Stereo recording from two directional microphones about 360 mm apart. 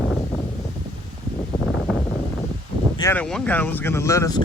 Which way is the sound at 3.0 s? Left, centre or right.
Centre.